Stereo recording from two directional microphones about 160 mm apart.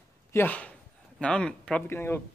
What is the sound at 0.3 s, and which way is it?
A man's voice, 10° left (ahead or behind).